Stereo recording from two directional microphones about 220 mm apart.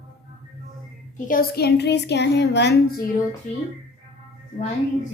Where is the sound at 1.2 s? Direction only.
45° left (ahead or behind).